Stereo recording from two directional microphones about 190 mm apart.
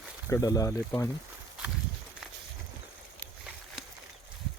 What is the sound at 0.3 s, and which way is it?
Speech, 15° left (ahead or behind).